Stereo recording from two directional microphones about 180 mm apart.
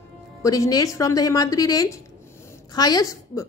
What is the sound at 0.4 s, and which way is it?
A woman's voice, 20° left (ahead or behind).